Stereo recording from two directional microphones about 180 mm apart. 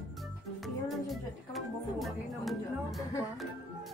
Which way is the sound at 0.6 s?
Centre (ahead or behind).